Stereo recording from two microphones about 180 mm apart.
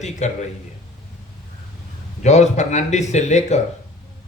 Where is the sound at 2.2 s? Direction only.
40° left (ahead or behind).